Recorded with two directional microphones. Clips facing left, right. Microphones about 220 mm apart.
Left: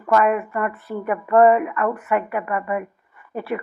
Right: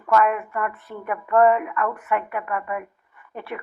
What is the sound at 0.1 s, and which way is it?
Speech, 5° left (ahead or behind).